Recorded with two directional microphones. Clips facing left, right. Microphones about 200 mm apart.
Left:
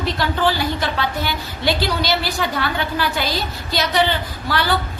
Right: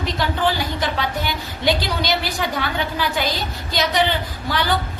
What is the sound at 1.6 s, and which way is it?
Speech, 20° right (ahead or behind).